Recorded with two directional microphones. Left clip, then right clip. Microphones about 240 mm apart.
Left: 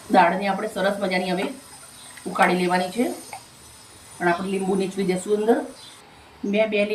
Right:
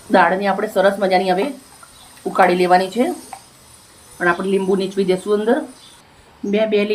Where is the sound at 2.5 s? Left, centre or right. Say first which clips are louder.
Right 8 dB; centre.